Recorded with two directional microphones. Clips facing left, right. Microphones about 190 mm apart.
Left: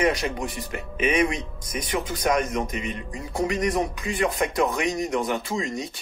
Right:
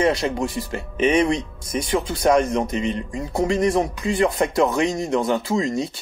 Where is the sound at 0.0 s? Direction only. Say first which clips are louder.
Right 4 dB; 30° right (ahead or behind).